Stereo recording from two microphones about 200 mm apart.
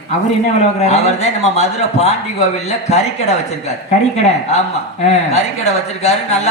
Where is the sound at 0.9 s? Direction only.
35° left (ahead or behind).